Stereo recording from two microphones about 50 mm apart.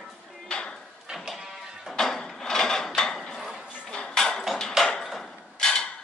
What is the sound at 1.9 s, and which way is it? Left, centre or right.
Drawer open or close, centre.